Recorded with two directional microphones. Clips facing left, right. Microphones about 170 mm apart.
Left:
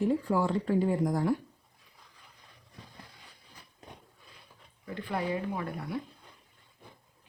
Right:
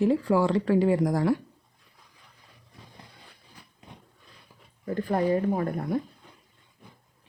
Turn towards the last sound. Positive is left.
turn(degrees=-45)  # may be behind; listen again after turning